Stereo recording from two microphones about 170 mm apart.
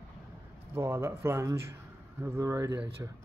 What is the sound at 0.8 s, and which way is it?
Speech, 15° right (ahead or behind).